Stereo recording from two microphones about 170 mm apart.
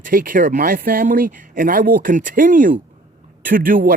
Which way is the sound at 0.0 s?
55° right (ahead or behind).